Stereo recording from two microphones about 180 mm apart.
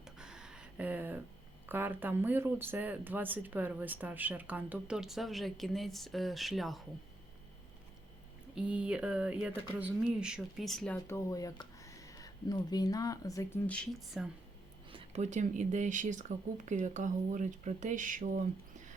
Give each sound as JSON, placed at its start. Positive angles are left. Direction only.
{"t": 0.0, "sound": "a sound", "side_deg": -5}
{"t": 1.6, "sound": "speech", "side_deg": -10}
{"t": 8.5, "sound": "speech", "side_deg": -5}
{"t": 13.7, "sound": "speech", "side_deg": 5}
{"t": 14.8, "sound": "speech", "side_deg": -35}